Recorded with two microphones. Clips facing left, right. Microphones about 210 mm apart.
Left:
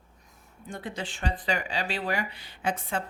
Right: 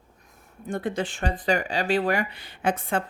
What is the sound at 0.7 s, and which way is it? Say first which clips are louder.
Speech: right 8 dB; 50° right (ahead or behind).